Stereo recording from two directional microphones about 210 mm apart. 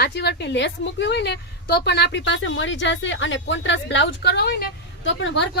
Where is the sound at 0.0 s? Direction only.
50° left (ahead or behind).